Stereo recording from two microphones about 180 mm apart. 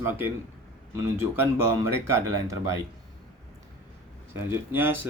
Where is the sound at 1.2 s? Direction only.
15° right (ahead or behind).